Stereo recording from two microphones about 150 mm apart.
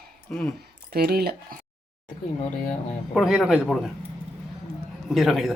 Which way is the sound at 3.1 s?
Centre (ahead or behind).